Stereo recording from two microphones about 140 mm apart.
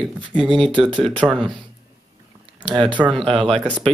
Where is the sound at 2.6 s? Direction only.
35° right (ahead or behind).